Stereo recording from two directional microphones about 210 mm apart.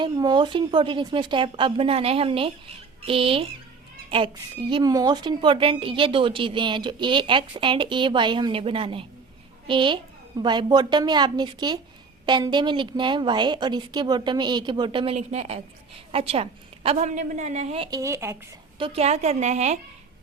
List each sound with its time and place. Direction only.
0.0 s a woman's voice: 20° right (ahead or behind)
17.9 s speech: 15° right (ahead or behind)
18.8 s a woman's voice: 30° right (ahead or behind)